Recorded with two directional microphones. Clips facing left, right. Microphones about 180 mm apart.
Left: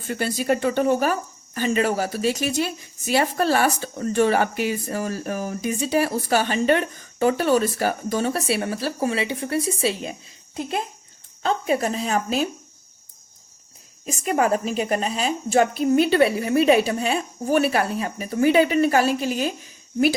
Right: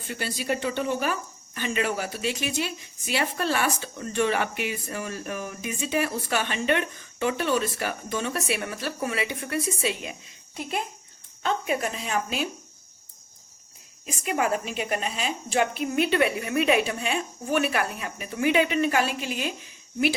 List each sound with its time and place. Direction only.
0.1 s speech: 45° left (ahead or behind)
11.4 s speech: 35° left (ahead or behind)
14.0 s speech: 40° left (ahead or behind)